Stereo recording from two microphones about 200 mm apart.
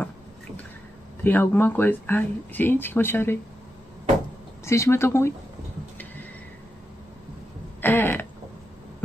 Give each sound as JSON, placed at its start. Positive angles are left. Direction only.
{"t": 1.2, "sound": "speech", "side_deg": 10}
{"t": 4.6, "sound": "speech", "side_deg": 15}
{"t": 7.8, "sound": "a sound", "side_deg": 10}